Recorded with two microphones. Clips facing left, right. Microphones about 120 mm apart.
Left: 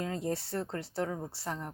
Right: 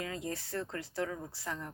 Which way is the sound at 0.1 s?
30° left (ahead or behind).